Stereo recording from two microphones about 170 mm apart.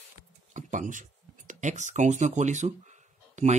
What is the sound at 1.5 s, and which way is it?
Speech, 45° right (ahead or behind).